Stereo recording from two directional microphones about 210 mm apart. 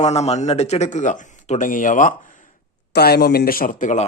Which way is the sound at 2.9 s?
50° left (ahead or behind).